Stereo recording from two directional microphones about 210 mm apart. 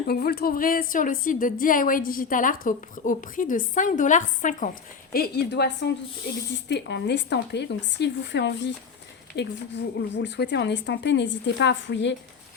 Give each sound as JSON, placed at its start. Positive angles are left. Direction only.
{"t": 0.0, "sound": "a woman's voice", "side_deg": 50}